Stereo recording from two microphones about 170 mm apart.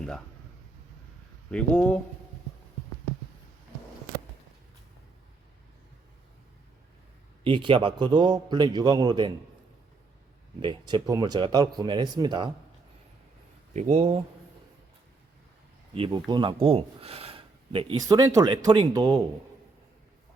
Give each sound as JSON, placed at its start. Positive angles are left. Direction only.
{"t": 1.5, "sound": "speech", "side_deg": 5}
{"t": 7.4, "sound": "a man's voice", "side_deg": -30}
{"t": 10.6, "sound": "a man's voice", "side_deg": -30}
{"t": 13.7, "sound": "speech", "side_deg": -40}
{"t": 16.0, "sound": "speech", "side_deg": -30}
{"t": 18.0, "sound": "a man's voice", "side_deg": -20}